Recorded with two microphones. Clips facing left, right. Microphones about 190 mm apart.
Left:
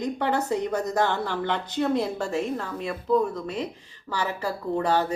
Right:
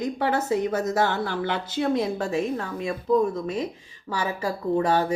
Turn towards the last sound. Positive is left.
turn(degrees=-10)  # may be behind; listen again after turning